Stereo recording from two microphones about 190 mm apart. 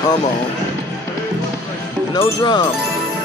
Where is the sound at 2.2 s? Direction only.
25° left (ahead or behind).